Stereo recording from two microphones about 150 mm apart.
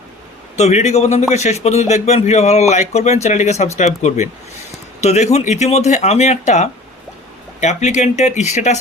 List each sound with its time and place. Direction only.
0.5 s speech: 50° left (ahead or behind)